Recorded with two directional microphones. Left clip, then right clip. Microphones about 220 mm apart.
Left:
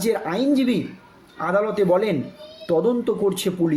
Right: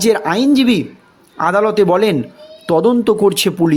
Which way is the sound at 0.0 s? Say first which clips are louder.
Right 8 dB; 45° right (ahead or behind).